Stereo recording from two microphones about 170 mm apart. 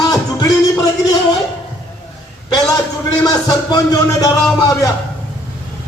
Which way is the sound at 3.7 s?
20° left (ahead or behind).